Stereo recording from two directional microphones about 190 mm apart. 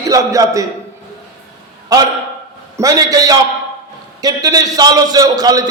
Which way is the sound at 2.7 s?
20° right (ahead or behind).